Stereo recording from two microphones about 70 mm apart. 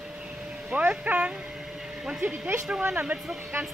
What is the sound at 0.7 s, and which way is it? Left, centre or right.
Speech, centre.